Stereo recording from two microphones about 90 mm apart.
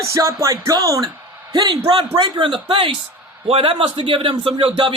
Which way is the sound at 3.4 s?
90° right.